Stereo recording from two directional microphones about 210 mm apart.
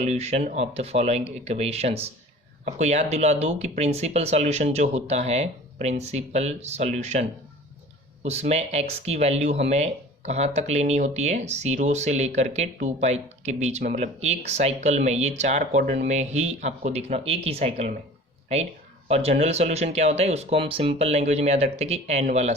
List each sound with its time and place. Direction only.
0.0 s speech: 30° right (ahead or behind)
19.0 s speech: 30° right (ahead or behind)